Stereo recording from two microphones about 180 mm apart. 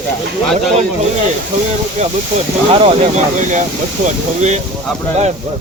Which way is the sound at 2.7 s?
30° right (ahead or behind).